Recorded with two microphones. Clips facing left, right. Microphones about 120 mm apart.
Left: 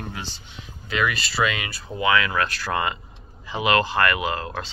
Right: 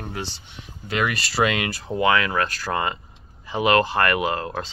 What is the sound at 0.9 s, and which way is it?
Speech, 60° right (ahead or behind).